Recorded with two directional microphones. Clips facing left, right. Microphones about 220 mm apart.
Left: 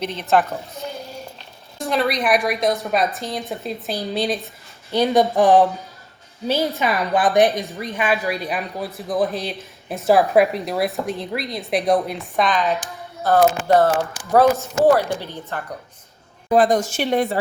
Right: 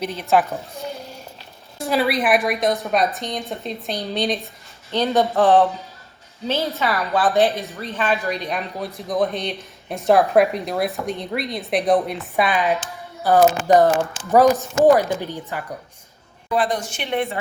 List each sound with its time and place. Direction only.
0.0 s a woman's voice: 10° right (ahead or behind)
4.9 s a woman's voice: 10° left (ahead or behind); by 15.6 s 15° right (ahead or behind)
16.5 s a woman's voice: 45° left (ahead or behind)